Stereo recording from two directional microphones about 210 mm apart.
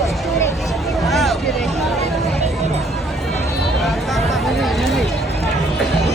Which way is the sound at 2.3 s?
30° right (ahead or behind).